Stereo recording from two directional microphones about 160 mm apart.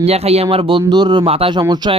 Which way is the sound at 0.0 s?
40° right (ahead or behind).